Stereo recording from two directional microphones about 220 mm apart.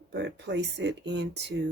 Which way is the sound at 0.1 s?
50° right (ahead or behind).